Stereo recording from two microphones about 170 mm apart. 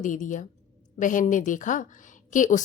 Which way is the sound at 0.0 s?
50° left (ahead or behind).